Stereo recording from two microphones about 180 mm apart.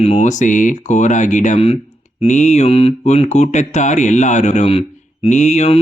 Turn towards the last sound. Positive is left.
turn(degrees=40)  # may be behind; listen again after turning